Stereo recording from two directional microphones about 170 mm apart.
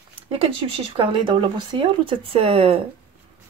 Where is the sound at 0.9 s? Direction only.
30° right (ahead or behind).